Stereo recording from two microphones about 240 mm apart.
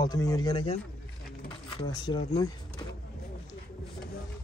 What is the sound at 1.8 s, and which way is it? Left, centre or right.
Speech, centre.